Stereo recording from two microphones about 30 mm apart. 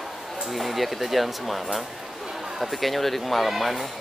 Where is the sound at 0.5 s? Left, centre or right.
Centre.